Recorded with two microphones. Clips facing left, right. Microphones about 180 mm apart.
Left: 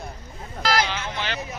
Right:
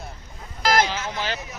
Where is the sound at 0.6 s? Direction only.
50° right (ahead or behind).